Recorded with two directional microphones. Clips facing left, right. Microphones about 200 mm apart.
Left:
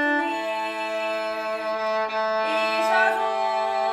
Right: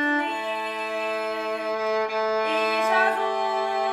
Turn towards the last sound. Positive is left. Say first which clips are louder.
# even
turn(degrees=-15)  # may be behind; listen again after turning